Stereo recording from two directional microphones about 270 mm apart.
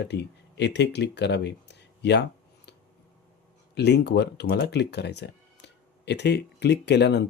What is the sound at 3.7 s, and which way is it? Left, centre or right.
Speech, left.